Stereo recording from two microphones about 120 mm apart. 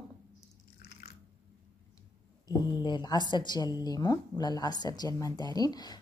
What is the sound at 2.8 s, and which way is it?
Speech, 35° left (ahead or behind).